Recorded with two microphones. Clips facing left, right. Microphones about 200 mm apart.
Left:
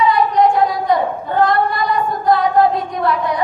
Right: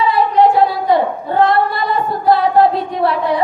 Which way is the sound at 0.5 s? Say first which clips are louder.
Right 2 dB; 30° right (ahead or behind).